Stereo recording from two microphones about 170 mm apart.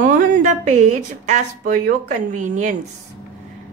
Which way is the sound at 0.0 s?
50° right (ahead or behind).